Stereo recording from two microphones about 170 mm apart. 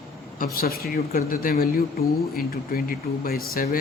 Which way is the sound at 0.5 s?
65° left (ahead or behind).